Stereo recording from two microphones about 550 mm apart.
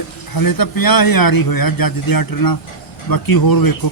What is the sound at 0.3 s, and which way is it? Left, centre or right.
A man's voice, left.